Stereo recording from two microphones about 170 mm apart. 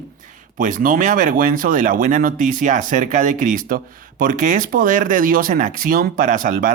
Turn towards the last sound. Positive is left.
turn(degrees=-50)  # may be behind; listen again after turning